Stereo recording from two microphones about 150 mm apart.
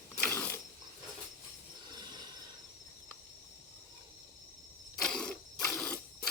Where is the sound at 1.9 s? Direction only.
30° right (ahead or behind).